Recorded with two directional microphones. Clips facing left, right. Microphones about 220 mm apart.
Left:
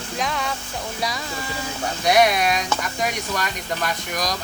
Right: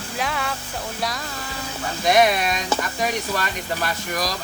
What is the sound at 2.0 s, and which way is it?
Speech, centre (ahead or behind).